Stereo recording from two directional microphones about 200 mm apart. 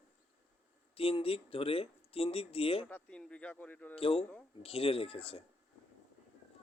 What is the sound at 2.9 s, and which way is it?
Speech, 5° left (ahead or behind).